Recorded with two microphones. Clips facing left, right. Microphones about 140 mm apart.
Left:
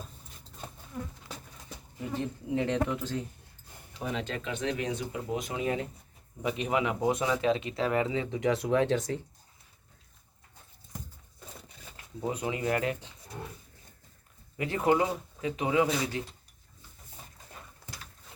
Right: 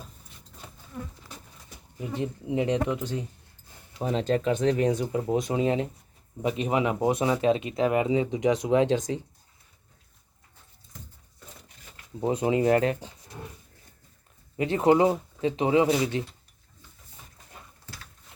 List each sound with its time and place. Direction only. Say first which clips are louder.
2.0 s speech: right 3 dB; 20° right (ahead or behind)
4.0 s speech: right 9 dB; 35° right (ahead or behind); by 9.2 s 20° right (ahead or behind)
12.2 s speech: right 8 dB; 30° right (ahead or behind)
14.5 s speech: right 5 dB; 25° right (ahead or behind)